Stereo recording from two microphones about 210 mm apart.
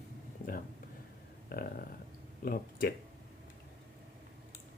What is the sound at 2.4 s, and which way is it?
Speech, 45° left (ahead or behind).